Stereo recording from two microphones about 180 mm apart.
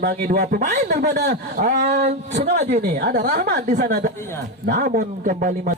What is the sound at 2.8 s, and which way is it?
A woman's voice, 60° right (ahead or behind).